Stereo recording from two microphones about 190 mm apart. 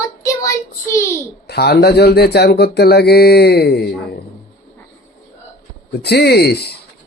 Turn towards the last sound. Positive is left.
turn(degrees=60)  # may be behind; listen again after turning